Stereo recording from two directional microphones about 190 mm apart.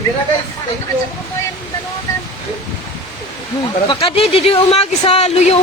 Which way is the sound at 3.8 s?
30° left (ahead or behind).